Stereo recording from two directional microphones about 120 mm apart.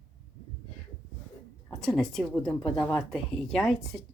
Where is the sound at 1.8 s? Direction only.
5° left (ahead or behind).